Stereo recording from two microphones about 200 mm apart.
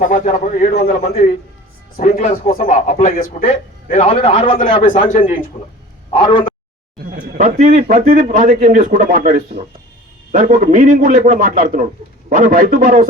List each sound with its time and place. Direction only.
0.0 s speech: 40° left (ahead or behind)
0.7 s a man's voice: 50° left (ahead or behind)
2.0 s a man's voice: 35° left (ahead or behind)
5.0 s speech: 40° left (ahead or behind)
6.1 s a man's voice: 25° left (ahead or behind)
7.3 s a man's voice: 40° right (ahead or behind)